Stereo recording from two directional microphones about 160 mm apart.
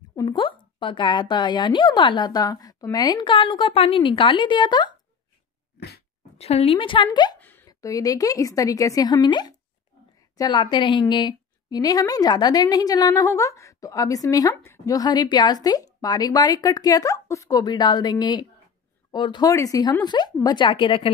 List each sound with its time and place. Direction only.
0.1 s a woman's voice: 25° left (ahead or behind)
5.8 s dog: 90° left
6.3 s a woman's voice: 40° left (ahead or behind)
7.3 s a woman's voice: 10° left (ahead or behind); by 21.1 s 30° left (ahead or behind)